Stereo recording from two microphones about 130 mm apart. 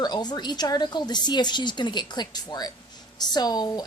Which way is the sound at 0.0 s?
30° left (ahead or behind).